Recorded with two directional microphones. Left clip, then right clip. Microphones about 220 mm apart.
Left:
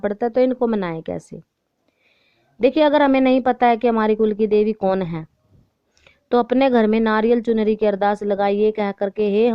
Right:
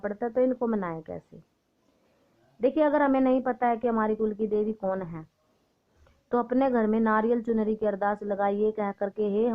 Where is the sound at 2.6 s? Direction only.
45° left (ahead or behind).